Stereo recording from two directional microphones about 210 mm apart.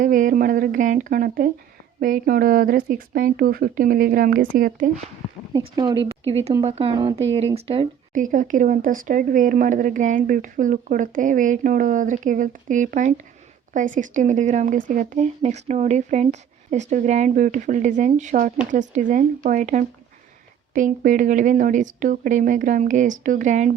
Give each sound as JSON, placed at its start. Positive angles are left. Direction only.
{"t": 0.0, "sound": "speech", "side_deg": -40}
{"t": 5.5, "sound": "speech", "side_deg": -20}
{"t": 8.1, "sound": "speech", "side_deg": -40}